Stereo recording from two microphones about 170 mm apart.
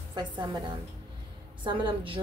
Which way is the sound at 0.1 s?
25° right (ahead or behind).